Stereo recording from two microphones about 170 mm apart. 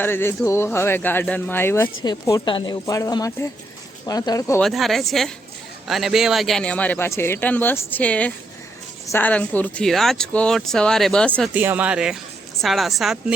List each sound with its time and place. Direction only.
0.0 s speech: 15° left (ahead or behind)
4.6 s speech: centre (ahead or behind)
11.5 s speech: 10° right (ahead or behind)